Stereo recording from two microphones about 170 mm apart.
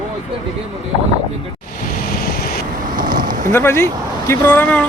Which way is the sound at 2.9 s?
55° right (ahead or behind).